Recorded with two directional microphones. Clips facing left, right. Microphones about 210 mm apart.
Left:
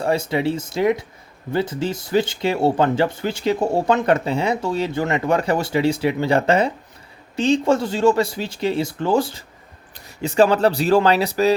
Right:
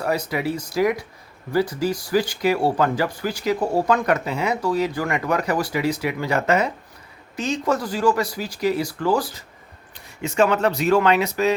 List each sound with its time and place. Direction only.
0.0 s speech: 25° left (ahead or behind)